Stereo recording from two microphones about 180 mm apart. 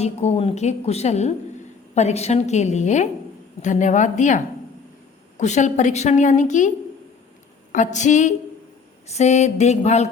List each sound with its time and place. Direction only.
0.0 s a woman's voice: 35° left (ahead or behind)